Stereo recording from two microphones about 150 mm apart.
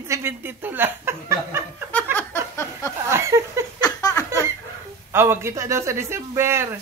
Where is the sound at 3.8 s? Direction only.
25° left (ahead or behind).